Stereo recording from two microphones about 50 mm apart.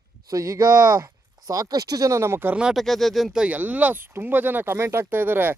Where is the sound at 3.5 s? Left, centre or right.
Right.